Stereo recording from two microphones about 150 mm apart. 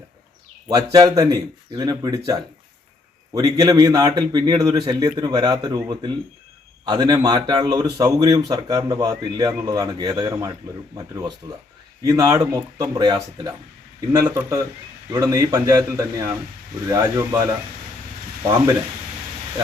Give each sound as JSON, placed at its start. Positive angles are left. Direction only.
{"t": 0.7, "sound": "speech", "side_deg": -25}